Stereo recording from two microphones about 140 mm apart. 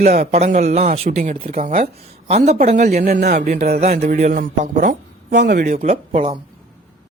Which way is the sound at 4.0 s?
55° right (ahead or behind).